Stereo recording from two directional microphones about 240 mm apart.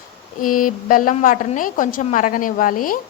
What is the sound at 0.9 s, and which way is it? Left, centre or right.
A woman's voice, left.